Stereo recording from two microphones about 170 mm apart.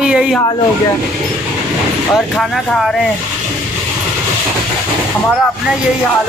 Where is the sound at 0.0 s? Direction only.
5° right (ahead or behind).